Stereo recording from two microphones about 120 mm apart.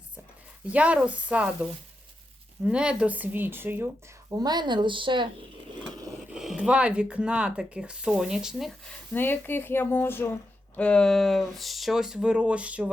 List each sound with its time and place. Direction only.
0.7 s speech: 10° right (ahead or behind)
2.6 s speech: 10° right (ahead or behind)
4.3 s speech: 35° right (ahead or behind)
6.3 s speech: 5° right (ahead or behind)
9.1 s speech: 15° left (ahead or behind); by 12.9 s 10° right (ahead or behind)